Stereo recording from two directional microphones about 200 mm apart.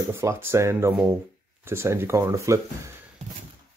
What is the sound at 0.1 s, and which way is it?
Speech, 15° right (ahead or behind).